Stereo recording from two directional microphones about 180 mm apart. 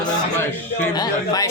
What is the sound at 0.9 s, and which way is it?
Speech, 20° left (ahead or behind).